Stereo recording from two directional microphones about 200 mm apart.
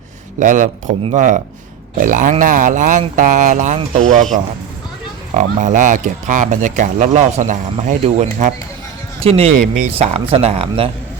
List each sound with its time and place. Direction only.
0.3 s speech: 40° right (ahead or behind)
5.3 s speech: 35° right (ahead or behind)